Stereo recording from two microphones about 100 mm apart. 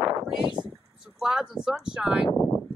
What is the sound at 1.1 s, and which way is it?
Speech, 5° right (ahead or behind).